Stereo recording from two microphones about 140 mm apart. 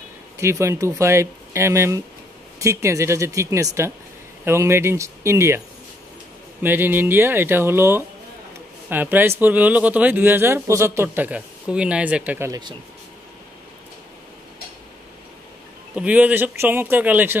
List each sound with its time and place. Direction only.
0.4 s speech: 20° right (ahead or behind)
6.6 s speech: 15° right (ahead or behind)
12.4 s speech: 30° right (ahead or behind)
15.9 s speech: 10° right (ahead or behind)